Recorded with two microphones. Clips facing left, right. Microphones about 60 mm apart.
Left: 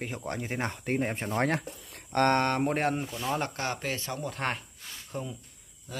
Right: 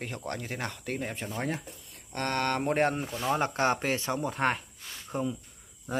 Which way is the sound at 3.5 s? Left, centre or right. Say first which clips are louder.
Right 6 dB; right.